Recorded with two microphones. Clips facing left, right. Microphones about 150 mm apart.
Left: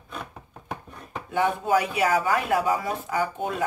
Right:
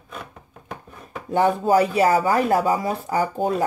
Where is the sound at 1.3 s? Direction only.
40° right (ahead or behind).